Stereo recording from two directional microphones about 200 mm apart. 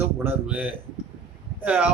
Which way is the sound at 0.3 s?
10° right (ahead or behind).